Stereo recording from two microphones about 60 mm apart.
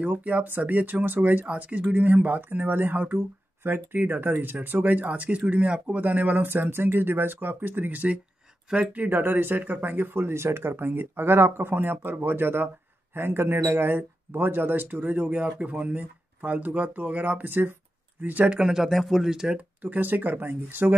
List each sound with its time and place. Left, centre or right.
0.0 s speech: right
18.7 s speech: centre
19.5 s speech: right